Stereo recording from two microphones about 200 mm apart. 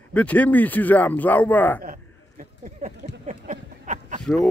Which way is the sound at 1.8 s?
45° right (ahead or behind).